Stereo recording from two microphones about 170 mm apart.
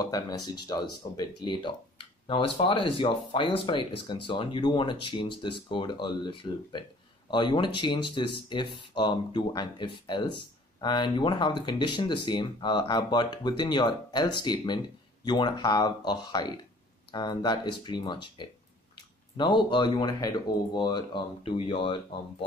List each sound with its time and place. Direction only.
0.0 s speech: 20° left (ahead or behind)